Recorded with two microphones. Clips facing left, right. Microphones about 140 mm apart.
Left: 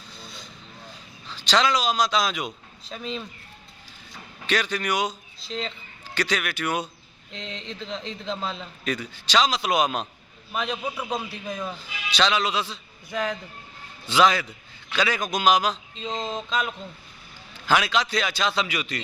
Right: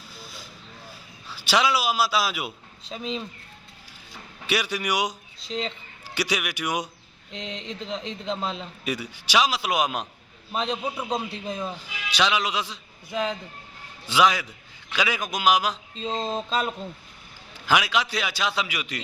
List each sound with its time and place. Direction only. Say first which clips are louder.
0.2 s vehicle: even; centre (ahead or behind)
1.3 s a man's voice: left 1 dB; 10° right (ahead or behind)
4.4 s a man's voice: left 1 dB; 10° right (ahead or behind)
5.5 s speech: right 2 dB; centre (ahead or behind)
6.1 s a man's voice: left 1 dB; 10° right (ahead or behind)
7.3 s a man's voice: right 2 dB; centre (ahead or behind)
10.5 s a man's voice: right 1 dB; 30° right (ahead or behind)
11.8 s a man's voice: left 2 dB; 10° right (ahead or behind)
16.2 s a sound: right 1 dB; 35° right (ahead or behind)
17.7 s a man's voice: left 1 dB; 10° right (ahead or behind)